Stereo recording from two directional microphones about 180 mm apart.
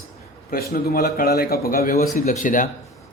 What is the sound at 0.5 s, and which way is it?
Speech, 60° left (ahead or behind).